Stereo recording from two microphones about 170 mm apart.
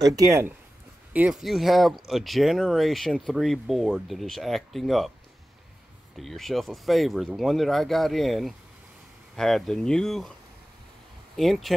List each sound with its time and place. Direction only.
0.0 s speech: 20° right (ahead or behind); by 5.1 s centre (ahead or behind)
6.1 s speech: centre (ahead or behind)
11.3 s speech: centre (ahead or behind)